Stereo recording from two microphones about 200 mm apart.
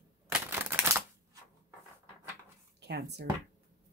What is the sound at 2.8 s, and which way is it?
Speech, 55° right (ahead or behind).